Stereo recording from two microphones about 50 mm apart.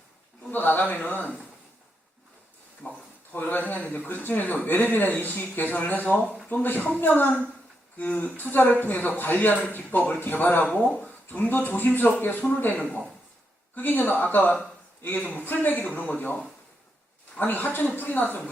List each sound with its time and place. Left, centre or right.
0.5 s a sound: left
3.3 s a man's voice: left
17.4 s a man's voice: left